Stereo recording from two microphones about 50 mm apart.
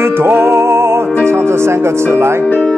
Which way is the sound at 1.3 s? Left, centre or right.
Right.